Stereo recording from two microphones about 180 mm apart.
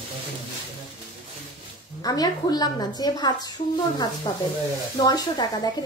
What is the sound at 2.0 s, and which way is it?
A woman's voice, 20° left (ahead or behind).